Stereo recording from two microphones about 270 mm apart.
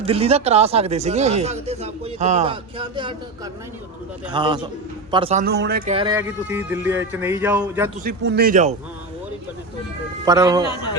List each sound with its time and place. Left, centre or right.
0.0 s speech: right
5.5 s speech: right
5.9 s speech: centre
6.1 s speech: centre
8.0 s speech: right
10.2 s speech: centre